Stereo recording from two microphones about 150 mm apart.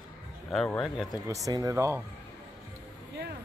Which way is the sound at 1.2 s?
20° right (ahead or behind).